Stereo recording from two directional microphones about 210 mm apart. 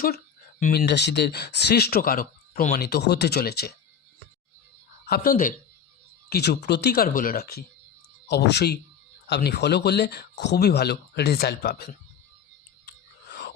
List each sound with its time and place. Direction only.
0.6 s speech: 45° left (ahead or behind)
5.0 s speech: 45° left (ahead or behind)
6.3 s speech: 50° left (ahead or behind)